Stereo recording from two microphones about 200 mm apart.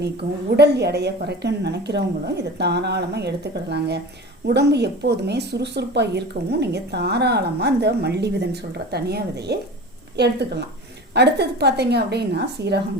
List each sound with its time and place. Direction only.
0.0 s speech: 55° right (ahead or behind)